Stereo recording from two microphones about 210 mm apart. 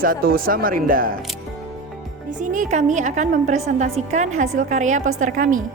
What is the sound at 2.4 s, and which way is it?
A woman's voice, 35° right (ahead or behind).